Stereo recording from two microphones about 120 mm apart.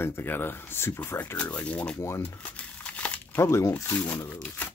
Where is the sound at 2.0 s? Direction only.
20° left (ahead or behind).